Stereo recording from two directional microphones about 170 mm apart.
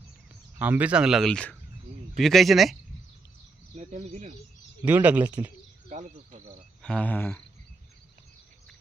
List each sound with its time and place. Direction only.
0.6 s speech: 10° right (ahead or behind)
3.8 s speech: 45° right (ahead or behind)
4.8 s speech: 10° right (ahead or behind)
5.9 s insect: 45° right (ahead or behind)
6.8 s cricket: 5° left (ahead or behind)